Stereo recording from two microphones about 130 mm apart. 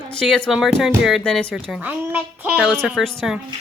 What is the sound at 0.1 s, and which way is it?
Speech, 5° left (ahead or behind).